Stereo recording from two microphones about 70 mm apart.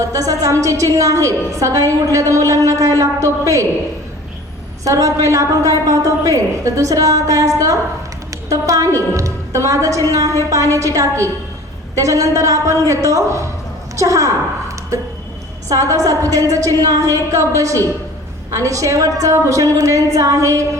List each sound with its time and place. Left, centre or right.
0.0 s a woman's voice: right
4.8 s a woman's voice: right